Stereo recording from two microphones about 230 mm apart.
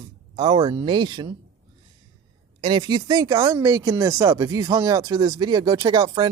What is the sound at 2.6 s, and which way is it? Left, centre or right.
Speech, right.